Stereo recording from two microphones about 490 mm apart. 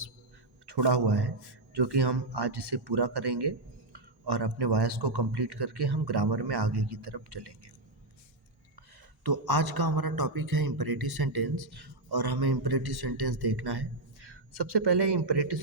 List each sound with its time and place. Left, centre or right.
0.6 s a man's voice: right
9.2 s a man's voice: right